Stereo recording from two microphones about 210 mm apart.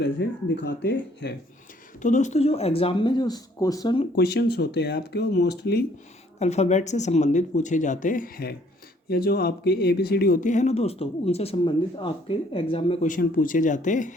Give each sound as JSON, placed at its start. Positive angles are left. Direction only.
{"t": 0.0, "sound": "speech", "side_deg": 55}
{"t": 2.0, "sound": "speech", "side_deg": 35}
{"t": 4.1, "sound": "speech", "side_deg": 50}
{"t": 6.4, "sound": "speech", "side_deg": 30}